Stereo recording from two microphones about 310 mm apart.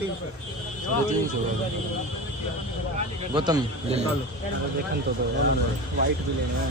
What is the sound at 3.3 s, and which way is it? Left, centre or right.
Speech, centre.